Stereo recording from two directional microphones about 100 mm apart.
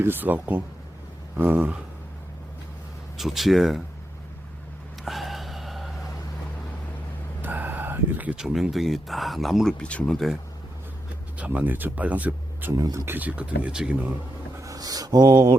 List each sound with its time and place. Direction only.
0.0 s speech: 20° right (ahead or behind)
3.2 s speech: centre (ahead or behind)
5.0 s snort: centre (ahead or behind)
7.4 s speech: 20° right (ahead or behind); by 10.2 s 10° left (ahead or behind)
11.3 s speech: 15° right (ahead or behind)
12.7 s speech: 35° right (ahead or behind)
13.1 s speech: 15° right (ahead or behind)
14.6 s a sound: 35° right (ahead or behind)
15.3 s mantra: 50° right (ahead or behind)